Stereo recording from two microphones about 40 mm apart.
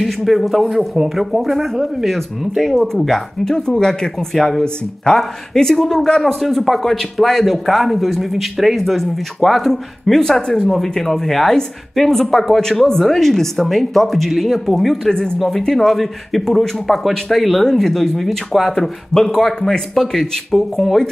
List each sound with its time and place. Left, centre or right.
0.0 s speech: centre
2.9 s speech: centre
6.4 s speech: centre
12.6 s speech: centre
15.0 s speech: centre